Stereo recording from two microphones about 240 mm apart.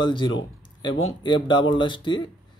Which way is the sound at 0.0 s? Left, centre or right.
Centre.